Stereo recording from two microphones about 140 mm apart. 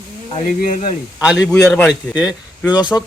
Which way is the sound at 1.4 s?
5° left (ahead or behind).